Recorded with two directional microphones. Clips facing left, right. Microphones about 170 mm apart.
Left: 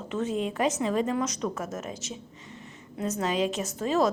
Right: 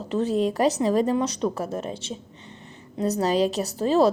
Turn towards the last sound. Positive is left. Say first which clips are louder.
# right 5 dB
turn(degrees=-35)  # may be behind; listen again after turning